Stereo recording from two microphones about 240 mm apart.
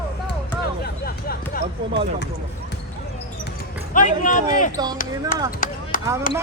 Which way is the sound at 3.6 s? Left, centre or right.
Left.